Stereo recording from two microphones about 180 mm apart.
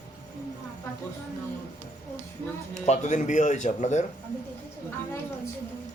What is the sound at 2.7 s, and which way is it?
A man's voice, 45° left (ahead or behind).